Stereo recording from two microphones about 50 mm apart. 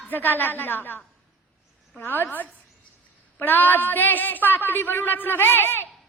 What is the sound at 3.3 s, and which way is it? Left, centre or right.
A woman's voice, left.